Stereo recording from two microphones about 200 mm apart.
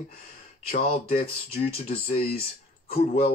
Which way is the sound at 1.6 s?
35° left (ahead or behind).